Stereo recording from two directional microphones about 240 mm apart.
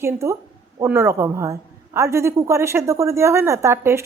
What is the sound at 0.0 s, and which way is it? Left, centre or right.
A woman's voice, centre.